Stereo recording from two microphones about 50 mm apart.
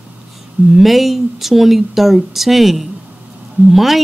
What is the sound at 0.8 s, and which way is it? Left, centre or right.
A woman's voice, centre.